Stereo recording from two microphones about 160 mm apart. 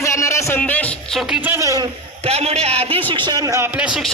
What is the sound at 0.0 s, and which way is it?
Music, 20° left (ahead or behind).